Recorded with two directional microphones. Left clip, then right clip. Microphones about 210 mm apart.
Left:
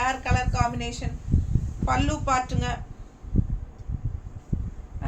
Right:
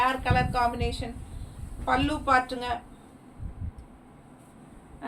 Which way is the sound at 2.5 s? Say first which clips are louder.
Left 1 dB; 10° left (ahead or behind).